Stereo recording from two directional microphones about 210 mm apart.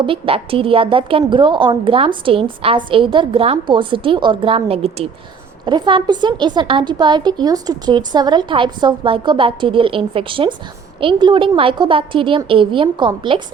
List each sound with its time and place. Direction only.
0.0 s a woman's voice: 25° right (ahead or behind)